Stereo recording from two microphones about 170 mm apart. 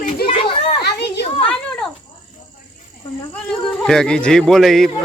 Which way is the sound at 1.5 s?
5° left (ahead or behind).